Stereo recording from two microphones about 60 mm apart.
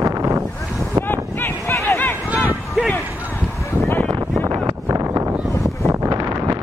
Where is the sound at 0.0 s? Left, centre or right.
Right.